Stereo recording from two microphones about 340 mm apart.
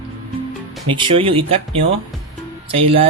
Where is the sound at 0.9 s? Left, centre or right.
Centre.